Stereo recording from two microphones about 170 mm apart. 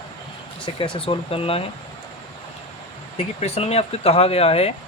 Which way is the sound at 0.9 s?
35° left (ahead or behind).